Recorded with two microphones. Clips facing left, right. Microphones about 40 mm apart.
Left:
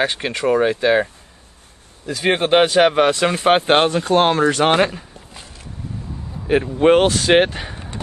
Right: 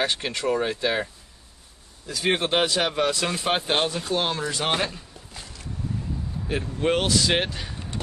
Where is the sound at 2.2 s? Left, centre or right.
Left.